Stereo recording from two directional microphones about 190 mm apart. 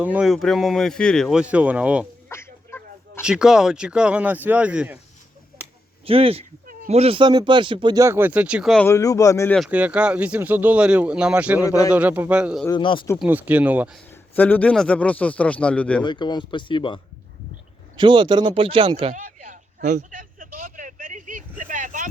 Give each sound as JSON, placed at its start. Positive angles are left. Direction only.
{"t": 0.0, "sound": "speech", "side_deg": -5}
{"t": 2.3, "sound": "a sound", "side_deg": 10}
{"t": 3.2, "sound": "speech", "side_deg": -5}
{"t": 6.1, "sound": "speech", "side_deg": -30}
{"t": 8.9, "sound": "a man's voice", "side_deg": 15}
{"t": 9.6, "sound": "speech", "side_deg": -5}
{"t": 12.6, "sound": "speech", "side_deg": 25}
{"t": 13.1, "sound": "speech", "side_deg": -10}
{"t": 14.1, "sound": "a man's voice", "side_deg": 10}
{"t": 16.0, "sound": "speech", "side_deg": 25}
{"t": 17.9, "sound": "speech", "side_deg": -25}
{"t": 19.1, "sound": "a sound", "side_deg": -40}